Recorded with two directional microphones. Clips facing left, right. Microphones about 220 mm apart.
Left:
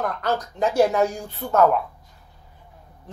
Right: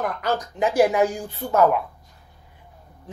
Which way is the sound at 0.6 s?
15° right (ahead or behind).